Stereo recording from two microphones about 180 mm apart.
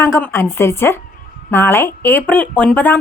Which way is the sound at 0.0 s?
15° left (ahead or behind).